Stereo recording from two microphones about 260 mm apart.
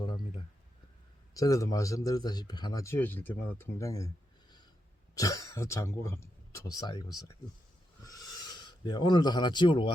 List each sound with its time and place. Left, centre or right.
1.3 s speech: centre
5.1 s speech: centre
8.0 s a sound: centre